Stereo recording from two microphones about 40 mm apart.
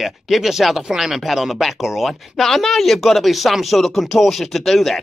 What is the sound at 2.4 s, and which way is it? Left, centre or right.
Speech, centre.